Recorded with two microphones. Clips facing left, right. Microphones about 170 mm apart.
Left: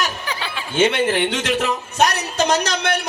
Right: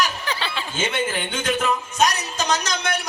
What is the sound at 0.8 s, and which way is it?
Speech, 70° left (ahead or behind).